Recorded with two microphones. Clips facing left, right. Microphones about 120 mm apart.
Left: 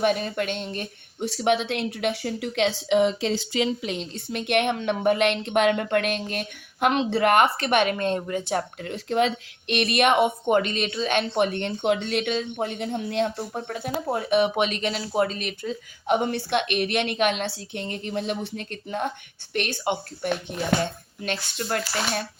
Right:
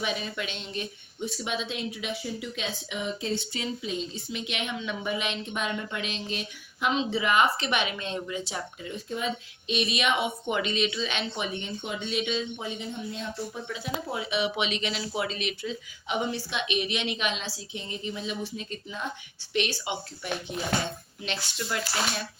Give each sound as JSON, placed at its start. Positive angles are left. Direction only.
{"t": 0.0, "sound": "speech", "side_deg": 55}
{"t": 1.2, "sound": "a woman's voice", "side_deg": 70}